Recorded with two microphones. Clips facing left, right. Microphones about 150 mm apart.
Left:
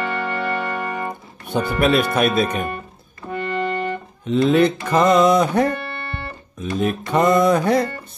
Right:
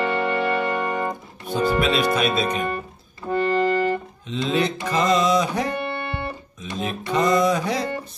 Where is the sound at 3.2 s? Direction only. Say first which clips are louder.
Right 4 dB; 35° right (ahead or behind).